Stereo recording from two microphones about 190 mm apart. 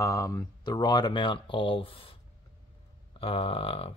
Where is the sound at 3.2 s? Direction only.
30° left (ahead or behind).